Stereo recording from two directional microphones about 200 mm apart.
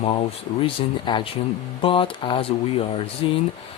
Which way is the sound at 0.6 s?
25° left (ahead or behind).